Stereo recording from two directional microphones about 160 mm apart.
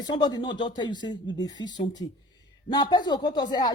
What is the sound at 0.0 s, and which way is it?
A woman's voice, 25° left (ahead or behind).